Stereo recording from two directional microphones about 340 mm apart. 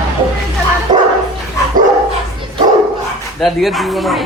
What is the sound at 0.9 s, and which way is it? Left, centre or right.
Dog, centre.